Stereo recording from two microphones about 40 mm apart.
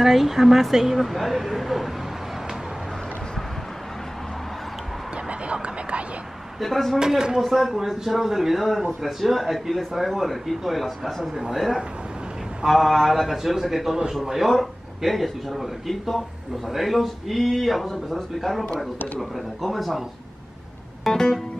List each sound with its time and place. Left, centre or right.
0.0 s speech: centre
5.5 s whispering: right
6.6 s speech: centre
7.2 s speech: centre
7.4 s speech: centre
21.0 s speech: centre